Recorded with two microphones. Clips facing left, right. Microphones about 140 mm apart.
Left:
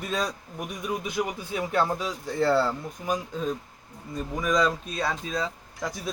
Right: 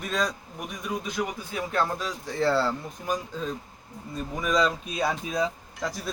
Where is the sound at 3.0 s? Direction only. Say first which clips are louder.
Left 2 dB; 5° left (ahead or behind).